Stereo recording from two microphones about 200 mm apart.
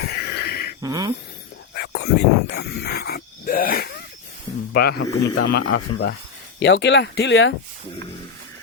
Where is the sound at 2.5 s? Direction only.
55° left (ahead or behind).